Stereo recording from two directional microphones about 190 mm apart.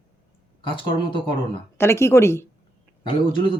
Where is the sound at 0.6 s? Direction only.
25° left (ahead or behind).